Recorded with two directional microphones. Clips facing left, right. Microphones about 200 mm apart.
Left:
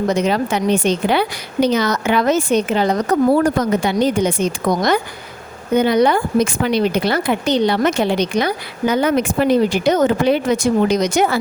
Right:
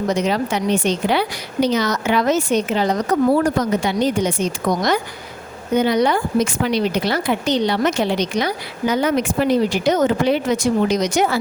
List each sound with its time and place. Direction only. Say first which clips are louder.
0.1 s a woman's voice: even; 55° left (ahead or behind)